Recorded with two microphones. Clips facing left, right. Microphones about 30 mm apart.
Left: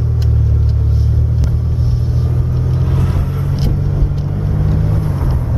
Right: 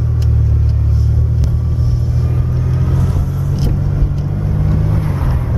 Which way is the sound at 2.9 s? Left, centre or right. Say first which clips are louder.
Even; left.